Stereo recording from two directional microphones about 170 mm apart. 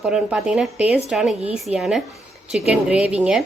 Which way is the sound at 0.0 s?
5° right (ahead or behind).